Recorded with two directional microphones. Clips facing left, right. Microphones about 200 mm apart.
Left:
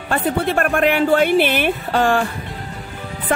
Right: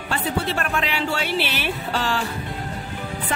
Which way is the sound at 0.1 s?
55° left (ahead or behind).